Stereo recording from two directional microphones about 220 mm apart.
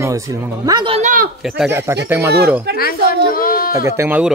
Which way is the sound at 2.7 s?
45° left (ahead or behind).